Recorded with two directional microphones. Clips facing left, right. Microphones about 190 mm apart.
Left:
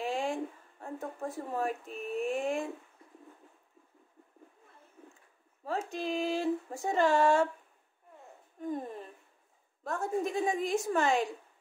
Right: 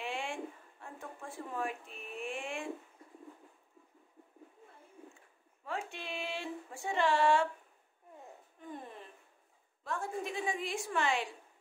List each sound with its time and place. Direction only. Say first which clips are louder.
0.0 s a sound: left 6 dB; 40° left (ahead or behind)
5.6 s speech: left 6 dB; 40° left (ahead or behind)
8.5 s a woman's voice: left 10 dB; 40° left (ahead or behind)